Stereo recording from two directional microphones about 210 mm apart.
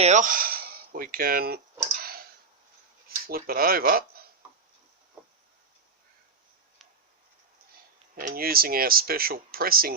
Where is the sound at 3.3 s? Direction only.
45° right (ahead or behind).